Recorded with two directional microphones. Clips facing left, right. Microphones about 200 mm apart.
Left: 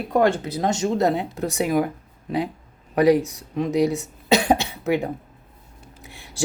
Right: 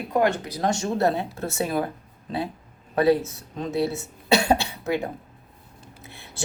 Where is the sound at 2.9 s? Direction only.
15° left (ahead or behind).